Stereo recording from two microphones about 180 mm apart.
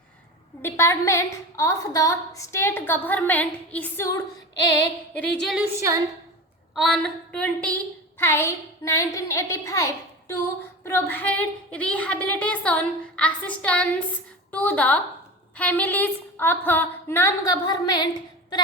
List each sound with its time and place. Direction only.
0.6 s a woman's voice: 15° left (ahead or behind)
5.1 s a sound: 5° left (ahead or behind)
5.7 s a woman's voice: 15° right (ahead or behind)
6.7 s a woman's voice: centre (ahead or behind); by 18.1 s 20° left (ahead or behind)